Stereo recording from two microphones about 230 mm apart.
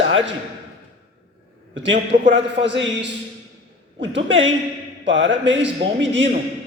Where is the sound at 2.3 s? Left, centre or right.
Right.